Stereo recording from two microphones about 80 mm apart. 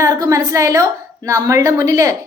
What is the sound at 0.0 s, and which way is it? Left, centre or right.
A woman's voice, right.